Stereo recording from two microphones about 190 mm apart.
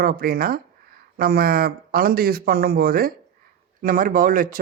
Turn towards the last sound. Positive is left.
turn(degrees=-45)  # may be behind; listen again after turning